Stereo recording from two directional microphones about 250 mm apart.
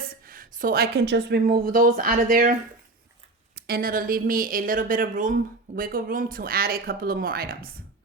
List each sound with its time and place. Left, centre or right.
0.3 s speech: right